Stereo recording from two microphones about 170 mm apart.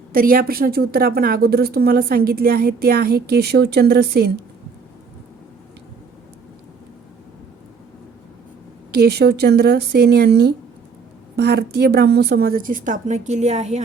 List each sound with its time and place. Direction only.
0.1 s a woman's voice: 55° right (ahead or behind)
8.9 s a woman's voice: 70° right (ahead or behind); by 13.8 s 40° right (ahead or behind)